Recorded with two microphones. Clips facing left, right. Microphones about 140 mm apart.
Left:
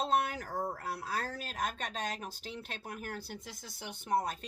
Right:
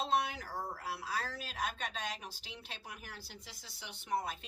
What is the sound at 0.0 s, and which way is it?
Speech, 45° left (ahead or behind).